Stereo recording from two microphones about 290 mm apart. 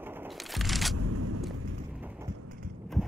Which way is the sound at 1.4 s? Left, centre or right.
Centre.